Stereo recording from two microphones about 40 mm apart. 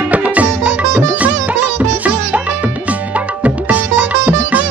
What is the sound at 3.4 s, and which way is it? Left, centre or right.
Music, right.